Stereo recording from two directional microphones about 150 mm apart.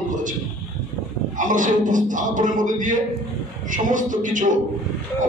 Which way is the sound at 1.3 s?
60° right (ahead or behind).